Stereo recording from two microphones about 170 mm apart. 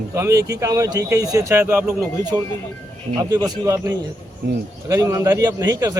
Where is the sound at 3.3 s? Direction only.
20° right (ahead or behind).